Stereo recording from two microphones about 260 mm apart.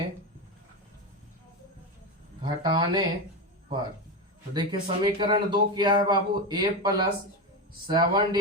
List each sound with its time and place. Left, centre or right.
2.4 s speech: centre
4.5 s speech: centre